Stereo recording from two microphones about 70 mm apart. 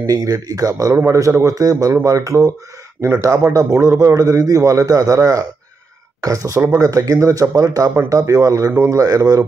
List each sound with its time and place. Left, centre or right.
0.0 s a man's voice: right
0.9 s a man's voice: right